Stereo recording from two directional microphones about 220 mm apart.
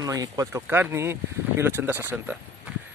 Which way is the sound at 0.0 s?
15° right (ahead or behind).